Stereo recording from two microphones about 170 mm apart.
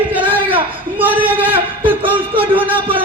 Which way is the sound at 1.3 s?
10° right (ahead or behind).